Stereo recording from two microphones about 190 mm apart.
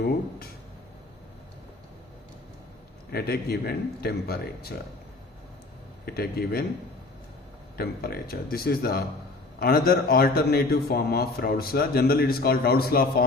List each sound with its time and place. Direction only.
3.1 s speech: 55° left (ahead or behind)
6.1 s a man's voice: 55° left (ahead or behind)
7.8 s a man's voice: 55° left (ahead or behind)